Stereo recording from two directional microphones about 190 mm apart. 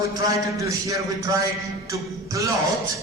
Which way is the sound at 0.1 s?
20° right (ahead or behind).